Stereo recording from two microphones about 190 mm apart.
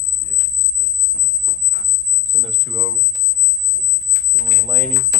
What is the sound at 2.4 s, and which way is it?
Speech, centre (ahead or behind).